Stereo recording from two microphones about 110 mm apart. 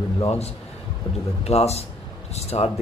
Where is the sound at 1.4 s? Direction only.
75° left (ahead or behind).